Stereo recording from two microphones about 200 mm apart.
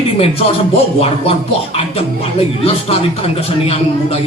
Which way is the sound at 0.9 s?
30° left (ahead or behind).